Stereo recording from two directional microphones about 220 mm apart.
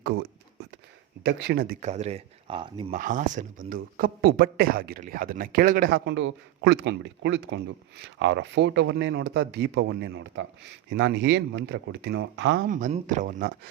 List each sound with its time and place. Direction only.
0.0 s speech: 45° right (ahead or behind)
1.8 s speech: 30° right (ahead or behind)
2.9 s speech: 35° right (ahead or behind); by 12.6 s 55° right (ahead or behind)
12.6 s speech: 35° right (ahead or behind)